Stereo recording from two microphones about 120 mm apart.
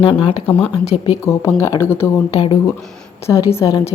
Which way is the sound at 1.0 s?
25° left (ahead or behind).